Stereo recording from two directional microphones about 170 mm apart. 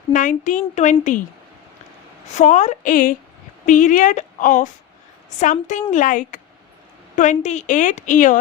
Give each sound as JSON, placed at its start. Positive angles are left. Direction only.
{"t": 0.1, "sound": "a woman's voice", "side_deg": 50}
{"t": 2.2, "sound": "a woman's voice", "side_deg": 45}